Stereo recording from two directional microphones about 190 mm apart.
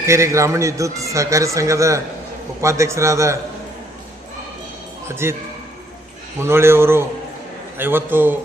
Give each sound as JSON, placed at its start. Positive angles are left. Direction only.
{"t": 0.0, "sound": "a man's voice", "side_deg": -15}
{"t": 5.0, "sound": "a man's voice", "side_deg": -15}
{"t": 6.4, "sound": "a man's voice", "side_deg": -15}